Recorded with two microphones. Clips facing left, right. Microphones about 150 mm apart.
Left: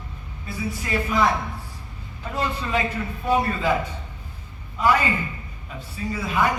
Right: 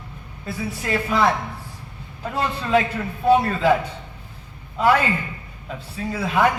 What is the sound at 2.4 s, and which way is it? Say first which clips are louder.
Speech: right 5 dB; 65° right (ahead or behind).